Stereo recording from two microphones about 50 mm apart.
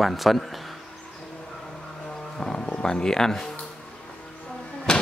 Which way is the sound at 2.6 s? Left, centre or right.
Left.